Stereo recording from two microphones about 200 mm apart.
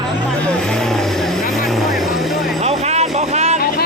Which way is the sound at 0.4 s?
5° left (ahead or behind).